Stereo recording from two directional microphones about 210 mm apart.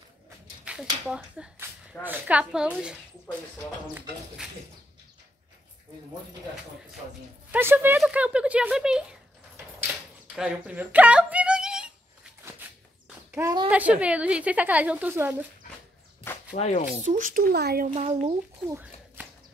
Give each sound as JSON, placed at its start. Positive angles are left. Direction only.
{"t": 0.7, "sound": "a sound", "side_deg": -5}
{"t": 1.0, "sound": "a woman's voice", "side_deg": -5}
{"t": 7.5, "sound": "speech", "side_deg": -10}
{"t": 10.3, "sound": "a sound", "side_deg": -5}
{"t": 13.3, "sound": "a woman's voice", "side_deg": -15}
{"t": 16.5, "sound": "speech", "side_deg": 35}
{"t": 17.0, "sound": "a child's voice", "side_deg": -35}
{"t": 17.9, "sound": "speech", "side_deg": -30}
{"t": 18.7, "sound": "speech", "side_deg": -10}